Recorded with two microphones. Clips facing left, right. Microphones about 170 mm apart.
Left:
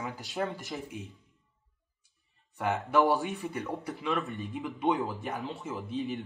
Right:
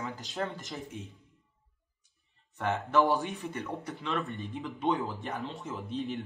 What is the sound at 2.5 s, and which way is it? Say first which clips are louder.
A man's voice: even; 5° left (ahead or behind).